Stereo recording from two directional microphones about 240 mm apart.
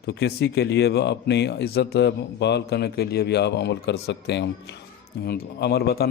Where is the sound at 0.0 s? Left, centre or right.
Left.